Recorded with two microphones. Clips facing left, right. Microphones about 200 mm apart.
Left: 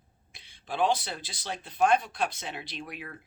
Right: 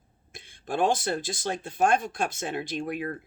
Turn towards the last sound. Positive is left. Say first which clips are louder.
# right 10 dB
turn(degrees=-50)  # may be behind; listen again after turning